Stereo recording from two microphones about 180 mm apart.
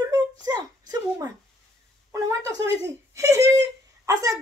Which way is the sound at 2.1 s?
20° right (ahead or behind).